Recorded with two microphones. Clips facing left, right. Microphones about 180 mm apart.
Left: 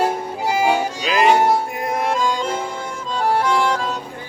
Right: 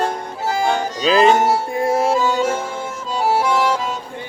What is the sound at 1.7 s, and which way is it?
Music, 30° right (ahead or behind).